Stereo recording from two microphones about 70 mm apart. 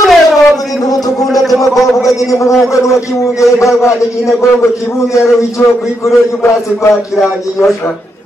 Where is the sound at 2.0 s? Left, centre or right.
Left.